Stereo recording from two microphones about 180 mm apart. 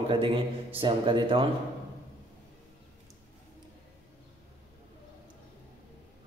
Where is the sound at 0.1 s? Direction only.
30° right (ahead or behind).